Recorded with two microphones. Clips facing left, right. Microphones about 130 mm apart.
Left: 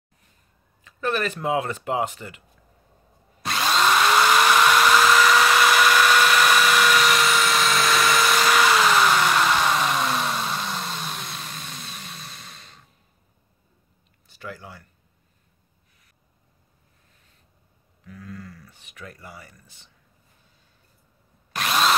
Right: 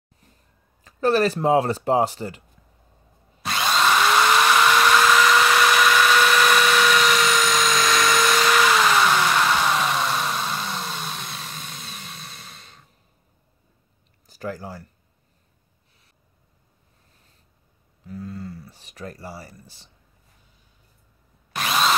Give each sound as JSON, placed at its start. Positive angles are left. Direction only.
{"t": 0.8, "sound": "speech", "side_deg": -35}
{"t": 3.4, "sound": "drill", "side_deg": 0}
{"t": 14.2, "sound": "speech", "side_deg": -40}
{"t": 18.0, "sound": "speech", "side_deg": -30}
{"t": 21.5, "sound": "drill", "side_deg": 0}